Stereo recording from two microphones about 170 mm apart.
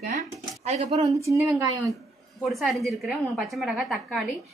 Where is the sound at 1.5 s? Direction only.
20° right (ahead or behind).